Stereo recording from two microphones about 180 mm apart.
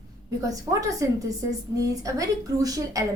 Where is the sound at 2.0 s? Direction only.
20° right (ahead or behind).